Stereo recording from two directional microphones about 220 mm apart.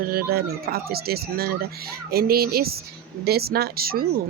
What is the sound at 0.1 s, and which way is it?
Speech, 45° right (ahead or behind).